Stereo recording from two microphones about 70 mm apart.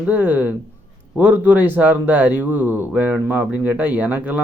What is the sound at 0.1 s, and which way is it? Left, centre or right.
A man's voice, right.